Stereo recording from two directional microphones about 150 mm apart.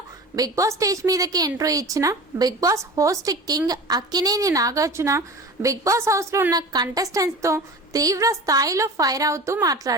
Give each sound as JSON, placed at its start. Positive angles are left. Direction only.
{"t": 0.3, "sound": "a woman's voice", "side_deg": -20}